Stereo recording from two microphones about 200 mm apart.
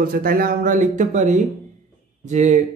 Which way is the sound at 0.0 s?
45° right (ahead or behind).